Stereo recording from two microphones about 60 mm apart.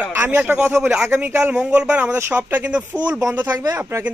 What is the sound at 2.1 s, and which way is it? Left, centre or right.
Speech, right.